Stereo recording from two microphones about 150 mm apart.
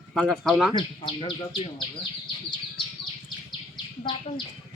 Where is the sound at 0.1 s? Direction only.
5° left (ahead or behind).